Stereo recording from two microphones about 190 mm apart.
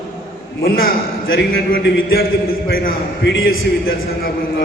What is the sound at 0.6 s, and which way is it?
A man's voice, 50° left (ahead or behind).